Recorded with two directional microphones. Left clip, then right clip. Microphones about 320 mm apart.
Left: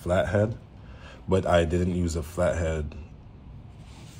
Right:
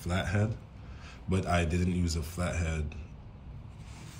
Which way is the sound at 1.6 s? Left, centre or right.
Centre.